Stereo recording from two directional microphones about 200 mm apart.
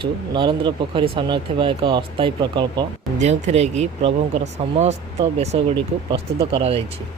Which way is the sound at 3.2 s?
35° right (ahead or behind).